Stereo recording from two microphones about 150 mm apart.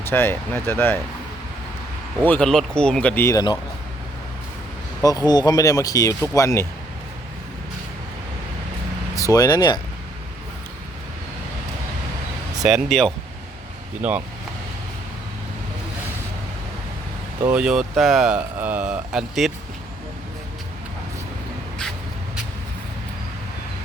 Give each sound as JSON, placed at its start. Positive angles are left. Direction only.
{"t": 0.0, "sound": "speech", "side_deg": 15}
{"t": 2.2, "sound": "speech", "side_deg": 10}
{"t": 5.0, "sound": "speech", "side_deg": 25}
{"t": 9.1, "sound": "speech", "side_deg": 25}
{"t": 12.6, "sound": "speech", "side_deg": 0}
{"t": 14.0, "sound": "speech", "side_deg": -10}
{"t": 17.4, "sound": "speech", "side_deg": -5}